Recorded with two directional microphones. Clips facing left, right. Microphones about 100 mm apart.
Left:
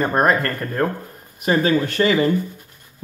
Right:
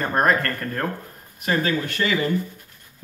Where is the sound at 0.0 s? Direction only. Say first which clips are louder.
Left 3 dB; 10° left (ahead or behind).